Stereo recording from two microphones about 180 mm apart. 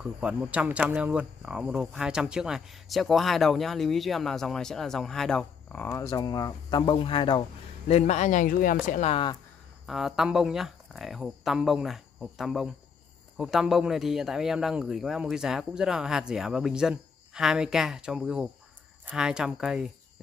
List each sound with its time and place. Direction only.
0.0 s speech: 5° right (ahead or behind); by 7.4 s 30° left (ahead or behind)
7.9 s speech: 40° left (ahead or behind)
9.8 s speech: centre (ahead or behind)